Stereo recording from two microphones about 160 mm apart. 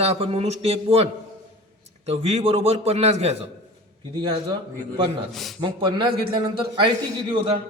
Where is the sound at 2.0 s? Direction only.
40° right (ahead or behind).